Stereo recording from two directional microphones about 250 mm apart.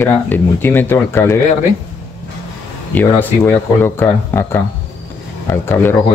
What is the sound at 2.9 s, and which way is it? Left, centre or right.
Speech, centre.